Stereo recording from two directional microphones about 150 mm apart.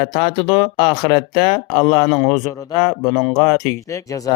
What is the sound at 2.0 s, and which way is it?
Speech, centre (ahead or behind).